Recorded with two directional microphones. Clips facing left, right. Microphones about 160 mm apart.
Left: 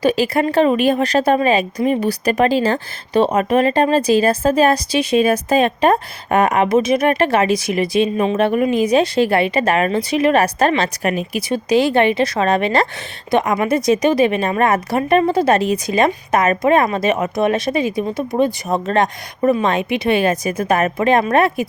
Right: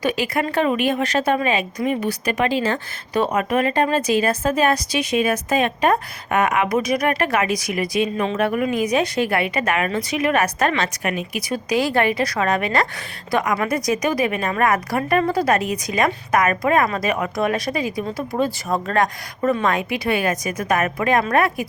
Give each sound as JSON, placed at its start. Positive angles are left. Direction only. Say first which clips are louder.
{"t": 0.0, "sound": "a woman's voice", "louder": "left 6 dB", "side_deg": 30}